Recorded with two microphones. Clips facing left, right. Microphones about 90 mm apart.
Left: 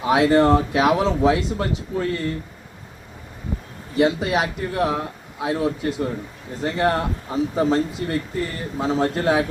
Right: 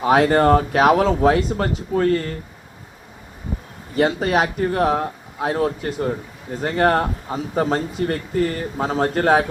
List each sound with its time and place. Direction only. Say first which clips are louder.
0.0 s speech: right 1 dB; 45° right (ahead or behind)
3.9 s speech: right 1 dB; 45° right (ahead or behind)